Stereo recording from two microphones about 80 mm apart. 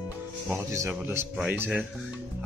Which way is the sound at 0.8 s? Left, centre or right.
Right.